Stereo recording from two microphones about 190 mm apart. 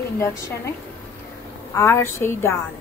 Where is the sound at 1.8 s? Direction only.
15° left (ahead or behind).